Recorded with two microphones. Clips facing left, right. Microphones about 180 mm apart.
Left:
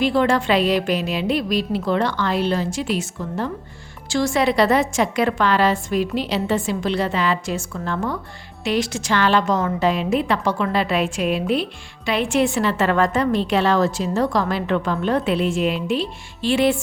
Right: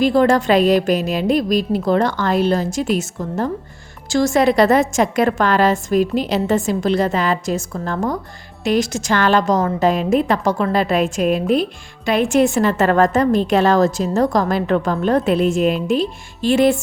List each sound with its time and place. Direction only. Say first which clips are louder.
0.0 s a woman's voice: right 4 dB; 40° right (ahead or behind)